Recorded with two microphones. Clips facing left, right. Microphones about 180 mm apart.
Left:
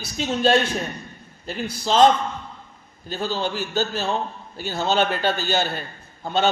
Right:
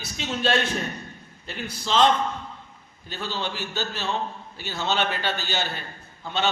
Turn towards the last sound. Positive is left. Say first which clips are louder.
# left 5 dB
turn(degrees=45)  # may be behind; listen again after turning